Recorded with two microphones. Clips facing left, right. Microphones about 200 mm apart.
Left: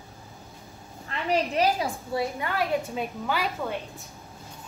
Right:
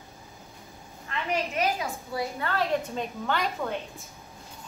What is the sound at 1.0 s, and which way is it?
A woman's voice, 30° left (ahead or behind).